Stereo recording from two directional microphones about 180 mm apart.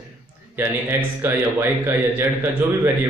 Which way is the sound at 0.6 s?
10° right (ahead or behind).